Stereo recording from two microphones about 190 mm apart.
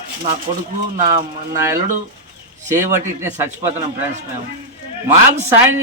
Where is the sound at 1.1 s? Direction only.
15° right (ahead or behind).